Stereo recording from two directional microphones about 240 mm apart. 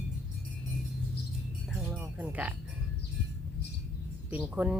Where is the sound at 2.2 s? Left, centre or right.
Centre.